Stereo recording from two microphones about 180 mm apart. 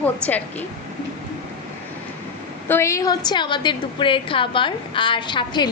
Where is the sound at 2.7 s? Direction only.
15° left (ahead or behind).